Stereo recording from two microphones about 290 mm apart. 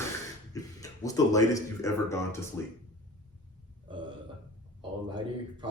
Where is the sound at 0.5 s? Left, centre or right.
Centre.